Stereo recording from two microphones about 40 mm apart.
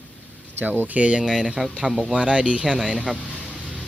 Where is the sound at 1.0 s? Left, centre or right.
Right.